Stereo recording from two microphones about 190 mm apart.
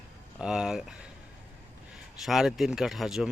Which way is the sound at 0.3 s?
5° right (ahead or behind).